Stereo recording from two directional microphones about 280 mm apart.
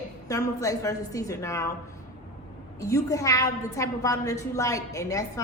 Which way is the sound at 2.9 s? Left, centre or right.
Centre.